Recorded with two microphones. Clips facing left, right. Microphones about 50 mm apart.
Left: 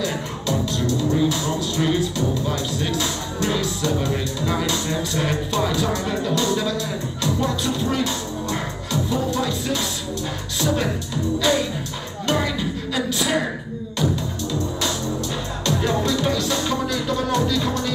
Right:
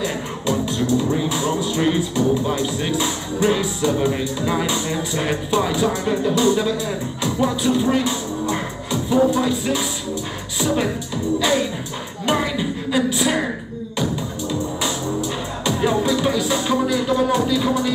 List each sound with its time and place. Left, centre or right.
0.0 s speech: right
12.3 s music: centre
15.6 s music: centre